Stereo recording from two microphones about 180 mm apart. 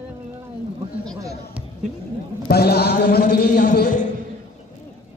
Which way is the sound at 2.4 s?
60° left (ahead or behind).